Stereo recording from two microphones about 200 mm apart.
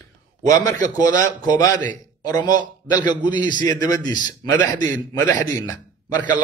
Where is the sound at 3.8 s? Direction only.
20° left (ahead or behind).